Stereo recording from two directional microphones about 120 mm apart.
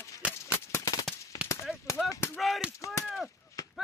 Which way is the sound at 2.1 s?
25° left (ahead or behind).